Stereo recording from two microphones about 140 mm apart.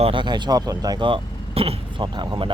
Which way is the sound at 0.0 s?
35° right (ahead or behind).